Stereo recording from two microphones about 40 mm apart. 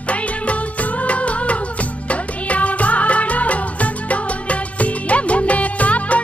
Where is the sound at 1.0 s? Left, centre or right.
Left.